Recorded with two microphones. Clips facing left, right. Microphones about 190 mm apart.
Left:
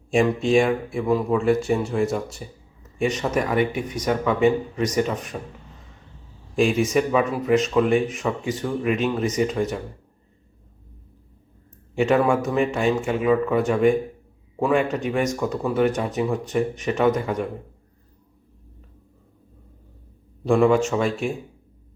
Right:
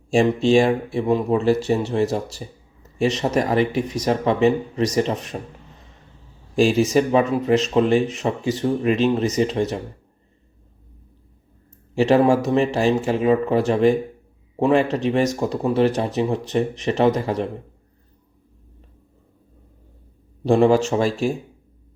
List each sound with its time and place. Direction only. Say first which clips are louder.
0.1 s speech: right 2 dB; 30° right (ahead or behind)
6.6 s speech: right 3 dB; 30° right (ahead or behind)
11.9 s speech: right 3 dB; 30° right (ahead or behind)
20.4 s speech: right 2 dB; 30° right (ahead or behind)